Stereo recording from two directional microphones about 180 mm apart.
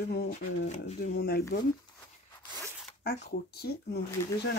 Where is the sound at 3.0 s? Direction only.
65° left (ahead or behind).